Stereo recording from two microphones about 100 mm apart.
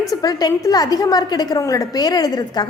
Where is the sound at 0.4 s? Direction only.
40° left (ahead or behind).